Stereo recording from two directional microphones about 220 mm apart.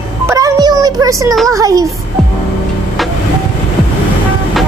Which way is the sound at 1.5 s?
15° right (ahead or behind).